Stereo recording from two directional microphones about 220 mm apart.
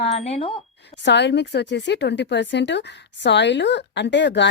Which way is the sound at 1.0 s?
50° left (ahead or behind).